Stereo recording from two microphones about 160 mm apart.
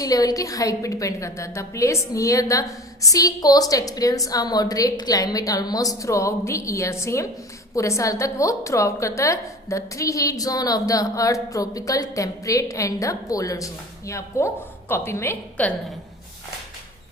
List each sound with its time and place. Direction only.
0.0 s a woman's voice: 25° left (ahead or behind)